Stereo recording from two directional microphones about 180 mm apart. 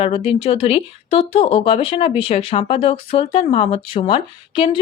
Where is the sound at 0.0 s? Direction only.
30° left (ahead or behind).